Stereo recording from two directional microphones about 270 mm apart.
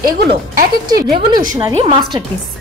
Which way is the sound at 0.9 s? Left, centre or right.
Centre.